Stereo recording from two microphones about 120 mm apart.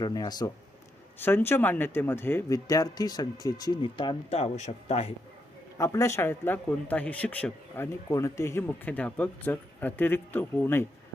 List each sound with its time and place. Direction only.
0.0 s speech: 35° left (ahead or behind)
1.2 s speech: 20° left (ahead or behind)
2.5 s speech: 30° left (ahead or behind)
3.8 s speech: 40° left (ahead or behind)
4.3 s a man's voice: 60° left (ahead or behind)
5.7 s speech: 25° left (ahead or behind)
8.1 s speech: 25° left (ahead or behind)